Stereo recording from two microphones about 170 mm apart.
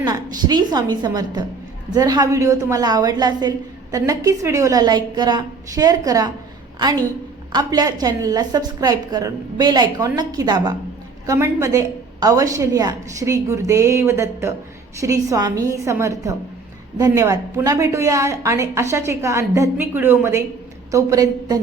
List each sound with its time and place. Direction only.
0.0 s a woman's voice: 25° right (ahead or behind)
7.5 s a woman's voice: 20° right (ahead or behind)